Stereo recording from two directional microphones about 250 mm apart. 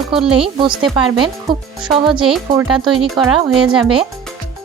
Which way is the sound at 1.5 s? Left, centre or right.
Centre.